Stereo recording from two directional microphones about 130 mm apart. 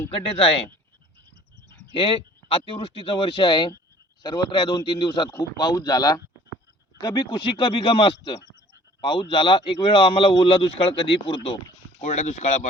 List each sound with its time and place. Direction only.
0.1 s speech: 45° left (ahead or behind)
1.9 s speech: 45° left (ahead or behind)
11.9 s speech: 60° left (ahead or behind)